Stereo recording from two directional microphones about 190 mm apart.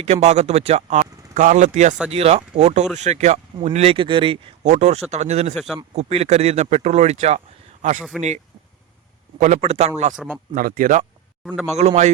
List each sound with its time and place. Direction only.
0.0 s speech: 35° right (ahead or behind)
5.5 s speech: centre (ahead or behind)
5.9 s speech: 35° right (ahead or behind)
8.1 s speech: centre (ahead or behind)
9.4 s speech: 35° right (ahead or behind)
10.2 s speech: 5° right (ahead or behind)
10.5 s speech: 50° right (ahead or behind)
11.4 s speech: centre (ahead or behind)
11.7 s speech: 35° right (ahead or behind)